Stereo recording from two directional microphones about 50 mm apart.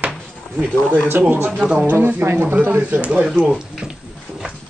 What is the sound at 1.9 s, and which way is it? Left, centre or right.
Speech, right.